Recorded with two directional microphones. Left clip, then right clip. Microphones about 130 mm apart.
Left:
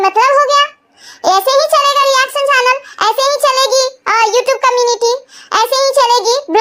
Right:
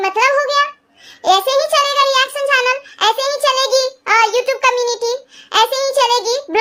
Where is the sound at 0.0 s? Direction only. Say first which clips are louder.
Left 5 dB; 25° left (ahead or behind).